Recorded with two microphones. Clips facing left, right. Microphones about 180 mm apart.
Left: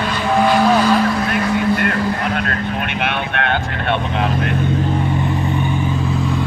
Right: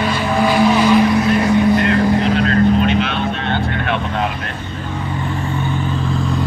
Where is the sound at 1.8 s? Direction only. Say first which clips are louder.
Right 5 dB; 50° left (ahead or behind).